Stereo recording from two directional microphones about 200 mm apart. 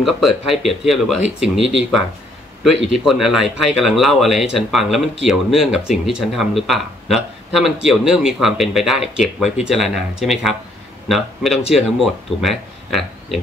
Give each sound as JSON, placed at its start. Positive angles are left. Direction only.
{"t": 0.0, "sound": "speech", "side_deg": 0}
{"t": 2.9, "sound": "speech", "side_deg": 0}